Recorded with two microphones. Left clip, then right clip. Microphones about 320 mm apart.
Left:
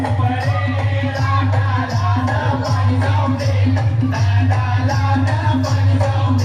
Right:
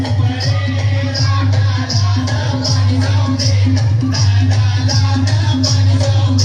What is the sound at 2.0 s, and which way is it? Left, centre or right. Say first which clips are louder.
Music: left 2 dB; centre.